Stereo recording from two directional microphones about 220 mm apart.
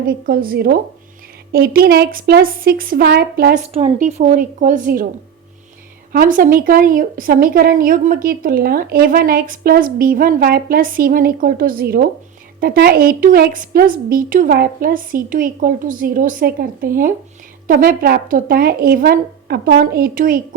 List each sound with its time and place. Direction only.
0.1 s speech: 45° right (ahead or behind)
3.7 s a woman's voice: 30° right (ahead or behind)
6.1 s a woman's voice: 40° right (ahead or behind)